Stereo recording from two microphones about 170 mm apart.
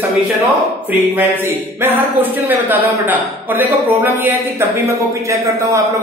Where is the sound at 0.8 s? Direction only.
10° right (ahead or behind).